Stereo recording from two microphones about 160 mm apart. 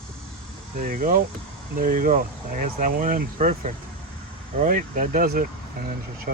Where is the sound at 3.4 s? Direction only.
50° right (ahead or behind).